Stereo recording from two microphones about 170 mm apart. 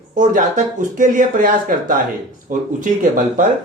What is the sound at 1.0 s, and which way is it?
Speech, 50° right (ahead or behind).